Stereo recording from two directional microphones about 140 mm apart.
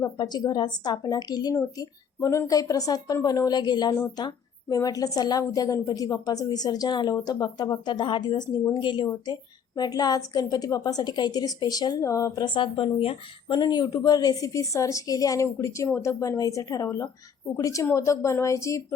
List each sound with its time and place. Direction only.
0.0 s a woman's voice: 30° left (ahead or behind)
12.5 s speech: 35° left (ahead or behind)
13.6 s a woman's voice: 30° left (ahead or behind)